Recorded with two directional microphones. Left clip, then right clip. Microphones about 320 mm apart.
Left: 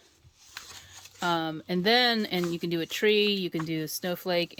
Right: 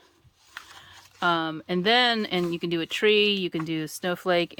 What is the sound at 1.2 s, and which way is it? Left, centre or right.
Speech, centre.